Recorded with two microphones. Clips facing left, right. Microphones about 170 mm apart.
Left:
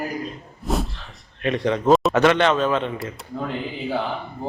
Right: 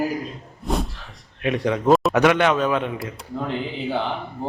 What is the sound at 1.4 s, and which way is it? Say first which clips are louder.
A man's voice: even; 10° right (ahead or behind).